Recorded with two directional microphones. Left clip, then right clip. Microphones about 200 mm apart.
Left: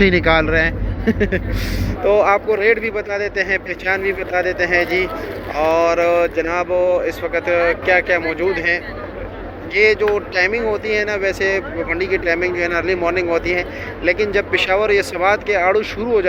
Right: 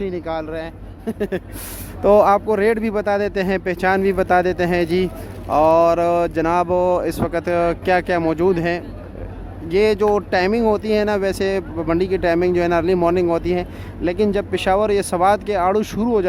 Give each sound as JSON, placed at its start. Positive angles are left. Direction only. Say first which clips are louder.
{"t": 0.0, "sound": "speech", "louder": "left 11 dB", "side_deg": -15}
{"t": 2.0, "sound": "speech", "louder": "right 1 dB", "side_deg": -35}